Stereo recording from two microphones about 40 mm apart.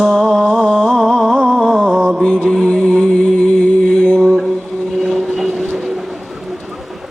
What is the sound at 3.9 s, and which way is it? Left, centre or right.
Mantra, centre.